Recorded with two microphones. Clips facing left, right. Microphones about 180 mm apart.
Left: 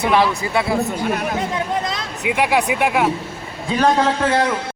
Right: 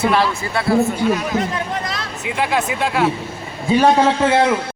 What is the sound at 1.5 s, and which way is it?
Speech, 20° left (ahead or behind).